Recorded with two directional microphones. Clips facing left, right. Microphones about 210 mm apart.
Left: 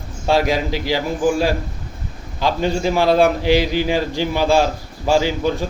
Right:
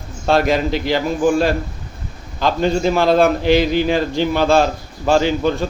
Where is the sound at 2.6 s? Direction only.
10° left (ahead or behind).